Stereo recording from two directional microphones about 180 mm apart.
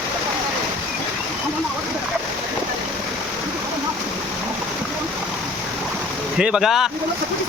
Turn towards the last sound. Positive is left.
turn(degrees=0)  # may be behind; listen again after turning